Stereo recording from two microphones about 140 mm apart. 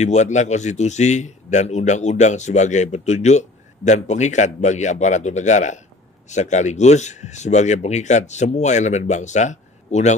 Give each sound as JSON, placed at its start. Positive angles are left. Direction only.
{"t": 0.0, "sound": "a man's voice", "side_deg": 55}